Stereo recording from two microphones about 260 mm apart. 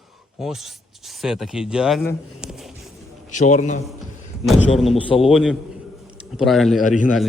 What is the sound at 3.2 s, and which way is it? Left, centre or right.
Speech, left.